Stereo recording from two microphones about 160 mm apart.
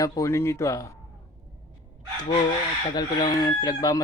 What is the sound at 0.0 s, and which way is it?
Speech, 20° left (ahead or behind).